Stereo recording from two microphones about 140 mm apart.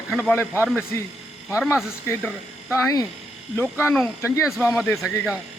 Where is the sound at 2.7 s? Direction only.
25° left (ahead or behind).